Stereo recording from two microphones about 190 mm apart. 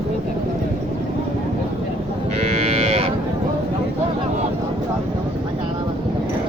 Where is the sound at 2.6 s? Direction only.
30° right (ahead or behind).